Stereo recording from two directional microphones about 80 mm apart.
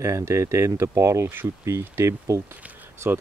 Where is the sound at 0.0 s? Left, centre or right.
Right.